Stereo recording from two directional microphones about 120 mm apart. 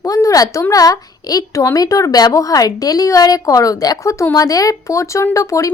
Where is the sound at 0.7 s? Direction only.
30° left (ahead or behind).